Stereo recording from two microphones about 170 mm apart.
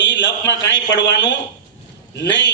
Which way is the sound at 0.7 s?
90° left.